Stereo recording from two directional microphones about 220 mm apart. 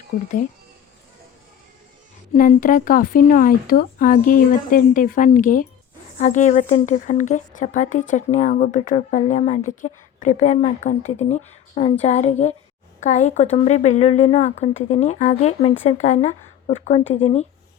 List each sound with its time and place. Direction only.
0.1 s speech: 40° left (ahead or behind)
2.3 s speech: 35° left (ahead or behind)